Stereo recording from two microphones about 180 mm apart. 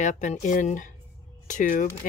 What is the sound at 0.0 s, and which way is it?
Speech, 40° left (ahead or behind).